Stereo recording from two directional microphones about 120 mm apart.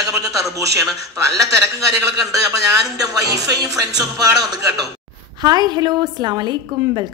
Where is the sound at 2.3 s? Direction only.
30° right (ahead or behind).